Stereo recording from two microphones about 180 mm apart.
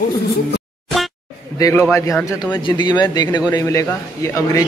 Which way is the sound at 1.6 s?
15° left (ahead or behind).